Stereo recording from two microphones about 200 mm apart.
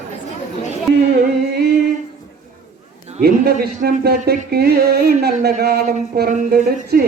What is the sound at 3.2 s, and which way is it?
Speech, 50° right (ahead or behind).